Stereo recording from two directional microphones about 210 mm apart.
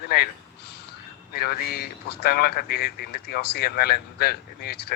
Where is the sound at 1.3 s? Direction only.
45° left (ahead or behind).